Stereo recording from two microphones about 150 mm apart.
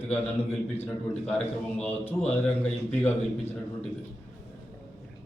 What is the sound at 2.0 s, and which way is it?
Speech, 40° left (ahead or behind).